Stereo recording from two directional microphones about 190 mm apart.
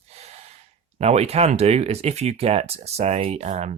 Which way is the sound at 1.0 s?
35° right (ahead or behind).